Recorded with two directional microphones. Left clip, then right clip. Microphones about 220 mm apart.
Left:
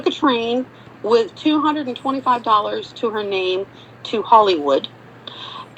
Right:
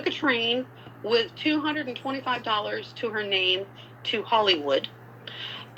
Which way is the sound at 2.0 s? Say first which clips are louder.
Left 12 dB; 25° left (ahead or behind).